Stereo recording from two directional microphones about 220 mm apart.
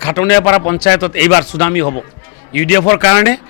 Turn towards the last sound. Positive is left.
turn(degrees=15)  # may be behind; listen again after turning